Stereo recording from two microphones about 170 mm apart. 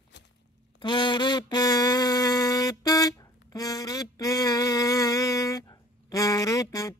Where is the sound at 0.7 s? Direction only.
25° left (ahead or behind).